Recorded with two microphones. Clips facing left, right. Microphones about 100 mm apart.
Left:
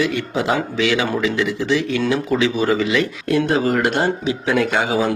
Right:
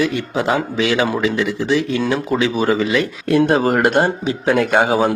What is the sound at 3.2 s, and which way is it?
Speech, 50° right (ahead or behind).